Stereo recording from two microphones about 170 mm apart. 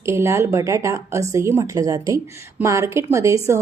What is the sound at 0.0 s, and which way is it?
A woman's voice, 15° right (ahead or behind).